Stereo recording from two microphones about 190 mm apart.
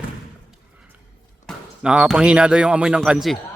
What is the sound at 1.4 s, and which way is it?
Speech, 5° right (ahead or behind).